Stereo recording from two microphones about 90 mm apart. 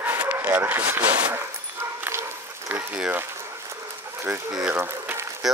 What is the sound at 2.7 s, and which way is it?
Boiling, 20° right (ahead or behind).